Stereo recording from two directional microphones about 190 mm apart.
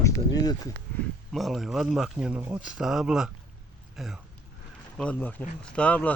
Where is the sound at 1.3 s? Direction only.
Centre (ahead or behind).